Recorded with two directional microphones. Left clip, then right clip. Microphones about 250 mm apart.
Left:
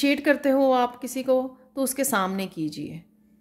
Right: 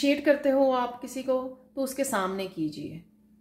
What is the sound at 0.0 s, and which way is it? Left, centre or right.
A woman's voice, left.